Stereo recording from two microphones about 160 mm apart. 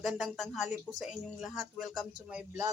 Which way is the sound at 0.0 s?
Centre (ahead or behind).